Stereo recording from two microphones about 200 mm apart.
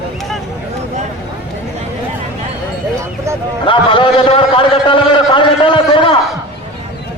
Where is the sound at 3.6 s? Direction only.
25° left (ahead or behind).